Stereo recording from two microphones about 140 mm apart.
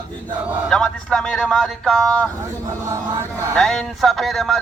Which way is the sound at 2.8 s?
20° right (ahead or behind).